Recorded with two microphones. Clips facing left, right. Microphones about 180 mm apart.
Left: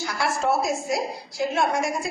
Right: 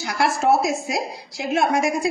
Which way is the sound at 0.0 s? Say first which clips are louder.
Right 4 dB; 80° right.